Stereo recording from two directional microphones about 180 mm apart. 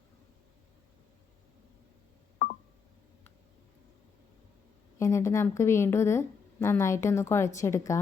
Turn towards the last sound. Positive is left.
turn(degrees=15)  # may be behind; listen again after turning